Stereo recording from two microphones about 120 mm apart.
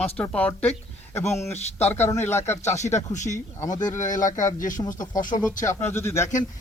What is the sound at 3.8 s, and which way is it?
Speech, 90° left.